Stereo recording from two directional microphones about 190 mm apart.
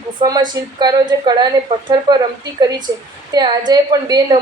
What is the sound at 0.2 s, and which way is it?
A woman's voice, 20° right (ahead or behind).